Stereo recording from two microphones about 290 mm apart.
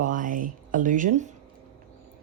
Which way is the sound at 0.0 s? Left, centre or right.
Right.